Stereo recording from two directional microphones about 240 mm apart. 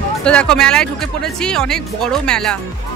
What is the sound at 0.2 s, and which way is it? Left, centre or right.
Speech, centre.